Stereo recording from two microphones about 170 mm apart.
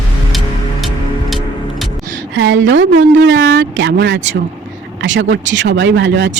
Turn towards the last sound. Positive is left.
turn(degrees=-85)